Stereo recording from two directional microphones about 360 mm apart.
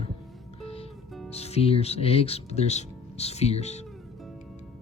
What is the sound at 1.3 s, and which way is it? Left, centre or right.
Speech, centre.